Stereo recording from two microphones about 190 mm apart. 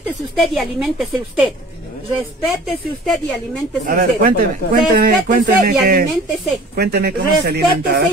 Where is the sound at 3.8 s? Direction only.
45° right (ahead or behind).